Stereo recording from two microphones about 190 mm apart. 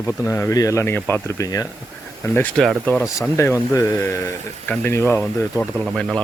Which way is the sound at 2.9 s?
15° left (ahead or behind).